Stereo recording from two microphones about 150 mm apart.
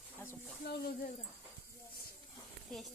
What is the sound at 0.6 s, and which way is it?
Speech, 90° left.